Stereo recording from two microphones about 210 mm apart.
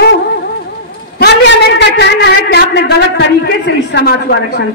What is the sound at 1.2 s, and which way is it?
A man's voice, 55° left (ahead or behind).